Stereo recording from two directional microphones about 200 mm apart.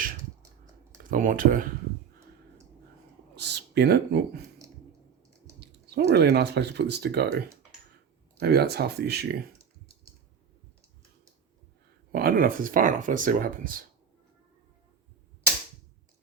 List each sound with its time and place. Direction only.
0.9 s speech: 40° right (ahead or behind)
3.3 s a sound: 55° right (ahead or behind)
5.5 s speech: 55° right (ahead or behind)
12.1 s speech: 45° right (ahead or behind)